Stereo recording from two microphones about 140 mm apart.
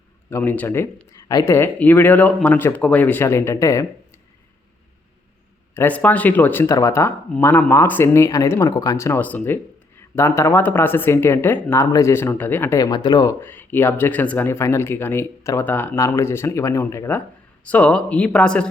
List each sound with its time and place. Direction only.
0.3 s speech: 15° left (ahead or behind)
5.7 s speech: 10° left (ahead or behind)
6.7 s speech: 25° left (ahead or behind)
13.4 s speech: 15° left (ahead or behind)